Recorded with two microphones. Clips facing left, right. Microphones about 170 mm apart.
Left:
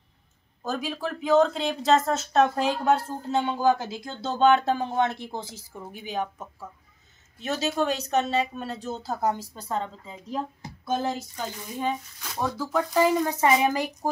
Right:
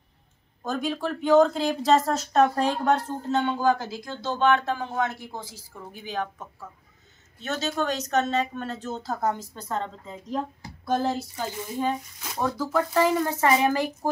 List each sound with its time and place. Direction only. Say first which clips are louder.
0.7 s a woman's voice: right 2 dB; 5° left (ahead or behind)
7.4 s a woman's voice: left 2 dB; 10° left (ahead or behind)